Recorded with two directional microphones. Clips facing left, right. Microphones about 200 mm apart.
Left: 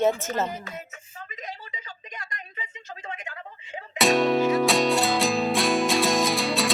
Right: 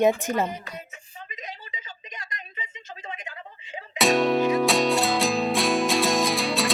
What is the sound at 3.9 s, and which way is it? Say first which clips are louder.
Music: even; centre (ahead or behind).